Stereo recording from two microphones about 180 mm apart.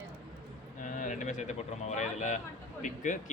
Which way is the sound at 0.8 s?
45° left (ahead or behind).